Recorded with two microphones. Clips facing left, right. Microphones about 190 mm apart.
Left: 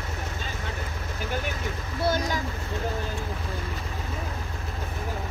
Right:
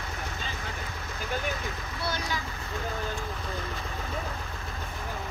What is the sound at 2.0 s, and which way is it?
Speech, 45° left (ahead or behind).